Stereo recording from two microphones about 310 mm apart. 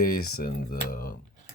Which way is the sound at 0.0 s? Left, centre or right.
Left.